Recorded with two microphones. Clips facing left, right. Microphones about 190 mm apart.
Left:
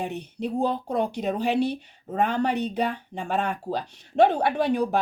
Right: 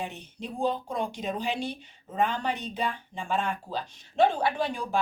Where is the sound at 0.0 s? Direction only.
65° left (ahead or behind).